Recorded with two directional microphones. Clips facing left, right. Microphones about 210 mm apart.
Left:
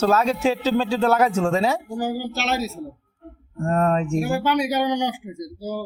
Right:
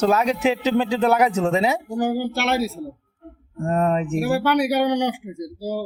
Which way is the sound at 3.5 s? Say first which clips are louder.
Even; 15° right (ahead or behind).